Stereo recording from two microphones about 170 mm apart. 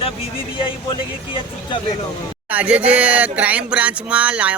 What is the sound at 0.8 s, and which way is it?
Speech, 30° left (ahead or behind).